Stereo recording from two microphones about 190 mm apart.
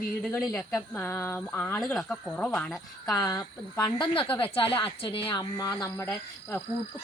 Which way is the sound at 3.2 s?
20° left (ahead or behind).